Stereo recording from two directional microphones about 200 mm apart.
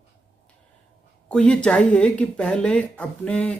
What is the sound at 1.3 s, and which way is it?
Speech, 5° left (ahead or behind).